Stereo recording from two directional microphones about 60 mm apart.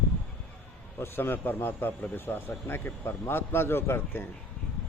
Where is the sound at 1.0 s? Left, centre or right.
Left.